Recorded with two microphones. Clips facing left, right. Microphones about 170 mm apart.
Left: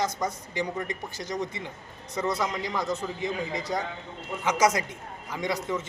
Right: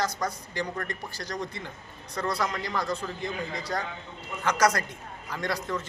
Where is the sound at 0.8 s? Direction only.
20° left (ahead or behind).